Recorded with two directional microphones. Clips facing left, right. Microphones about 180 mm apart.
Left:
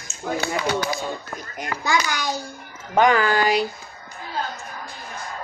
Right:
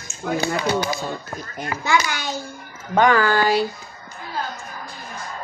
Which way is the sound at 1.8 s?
40° left (ahead or behind).